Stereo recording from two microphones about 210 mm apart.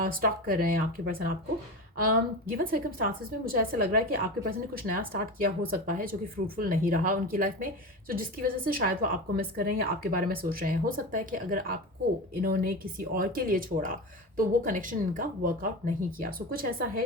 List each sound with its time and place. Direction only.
0.0 s a woman's voice: 45° right (ahead or behind)
2.5 s a woman's voice: 40° right (ahead or behind)